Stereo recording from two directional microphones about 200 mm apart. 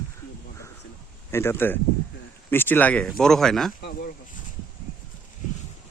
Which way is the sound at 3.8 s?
55° left (ahead or behind).